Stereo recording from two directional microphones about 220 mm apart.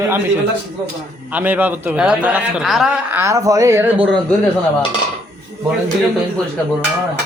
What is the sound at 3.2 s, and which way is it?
Speech, 15° right (ahead or behind).